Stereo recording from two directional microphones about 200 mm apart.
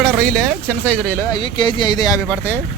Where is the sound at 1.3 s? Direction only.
25° left (ahead or behind).